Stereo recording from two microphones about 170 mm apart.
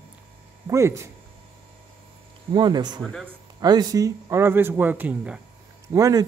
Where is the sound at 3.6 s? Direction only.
25° right (ahead or behind); by 5.4 s 5° right (ahead or behind).